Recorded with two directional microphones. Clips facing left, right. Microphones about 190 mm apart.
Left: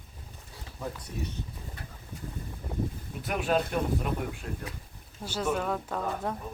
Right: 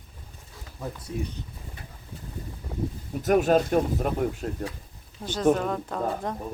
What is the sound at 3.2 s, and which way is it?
Speech, 45° right (ahead or behind).